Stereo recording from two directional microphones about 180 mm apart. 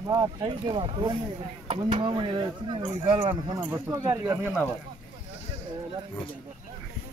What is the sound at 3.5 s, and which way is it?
Speech, 15° right (ahead or behind).